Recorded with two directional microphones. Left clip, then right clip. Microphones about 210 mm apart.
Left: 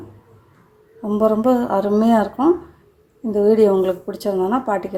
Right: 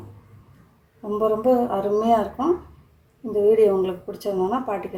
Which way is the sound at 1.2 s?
35° left (ahead or behind).